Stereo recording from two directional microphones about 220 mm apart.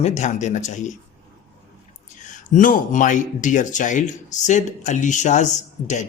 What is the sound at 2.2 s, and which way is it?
Speech, 35° left (ahead or behind).